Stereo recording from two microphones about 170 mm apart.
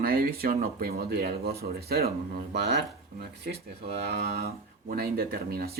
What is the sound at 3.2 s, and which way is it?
Speech, 75° right (ahead or behind).